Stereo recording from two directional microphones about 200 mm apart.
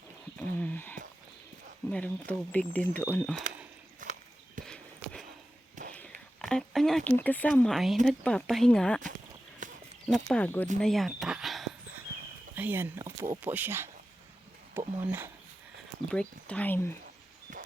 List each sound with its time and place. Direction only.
0.3 s a sound: 10° left (ahead or behind)
1.9 s speech: 5° left (ahead or behind)
4.0 s clip-clop: 40° right (ahead or behind)
4.6 s horse: 5° left (ahead or behind)
5.9 s a sound: 5° left (ahead or behind)
7.3 s speech: 10° left (ahead or behind)
9.6 s a sound: 40° right (ahead or behind)
10.1 s speech: 5° left (ahead or behind)
10.8 s dog: centre (ahead or behind)
12.5 s a sound: 10° right (ahead or behind)
13.4 s speech: 10° right (ahead or behind)
15.0 s speech: 10° right (ahead or behind)
16.1 s speech: 5° left (ahead or behind)